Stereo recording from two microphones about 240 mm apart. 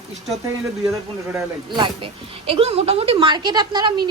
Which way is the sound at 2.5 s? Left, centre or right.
Right.